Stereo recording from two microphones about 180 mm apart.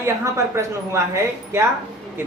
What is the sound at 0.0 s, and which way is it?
A woman's voice, 15° right (ahead or behind).